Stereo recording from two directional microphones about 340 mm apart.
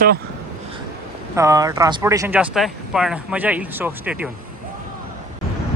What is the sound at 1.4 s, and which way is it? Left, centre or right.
Speech, centre.